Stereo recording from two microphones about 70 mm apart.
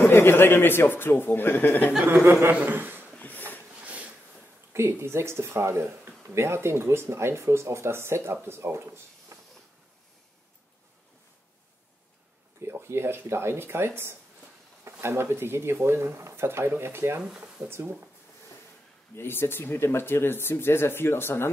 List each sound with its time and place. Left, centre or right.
0.0 s speech: left
2.0 s a man's voice: right
3.2 s a sound: left
3.8 s a sound: centre
4.7 s speech: right
12.6 s speech: right
17.2 s speech: centre
17.6 s speech: right
19.1 s speech: left